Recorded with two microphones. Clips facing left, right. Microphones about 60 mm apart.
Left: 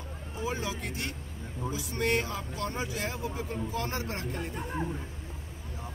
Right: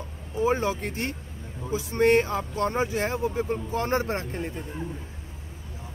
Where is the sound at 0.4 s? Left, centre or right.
Right.